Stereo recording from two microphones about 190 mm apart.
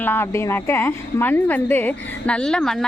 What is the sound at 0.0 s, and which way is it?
A woman's voice, 10° left (ahead or behind).